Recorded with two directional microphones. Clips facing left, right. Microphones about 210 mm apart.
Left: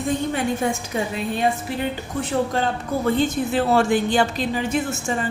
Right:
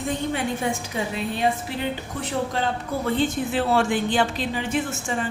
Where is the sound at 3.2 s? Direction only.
40° left (ahead or behind).